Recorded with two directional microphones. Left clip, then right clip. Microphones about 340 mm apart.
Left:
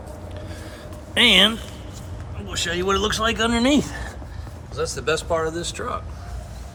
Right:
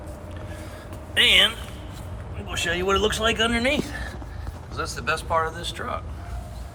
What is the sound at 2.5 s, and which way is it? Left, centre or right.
Speech, left.